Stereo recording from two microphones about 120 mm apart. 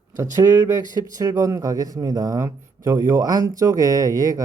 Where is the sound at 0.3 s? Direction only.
25° right (ahead or behind).